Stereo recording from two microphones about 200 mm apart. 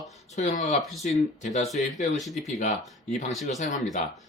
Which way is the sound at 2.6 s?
35° left (ahead or behind).